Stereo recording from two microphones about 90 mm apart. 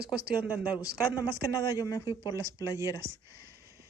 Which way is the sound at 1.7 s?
40° left (ahead or behind).